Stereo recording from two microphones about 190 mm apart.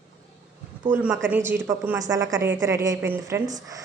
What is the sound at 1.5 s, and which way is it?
A woman's voice, 10° right (ahead or behind).